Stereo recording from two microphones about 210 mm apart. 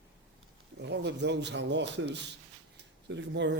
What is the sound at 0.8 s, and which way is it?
A man's voice, 55° right (ahead or behind).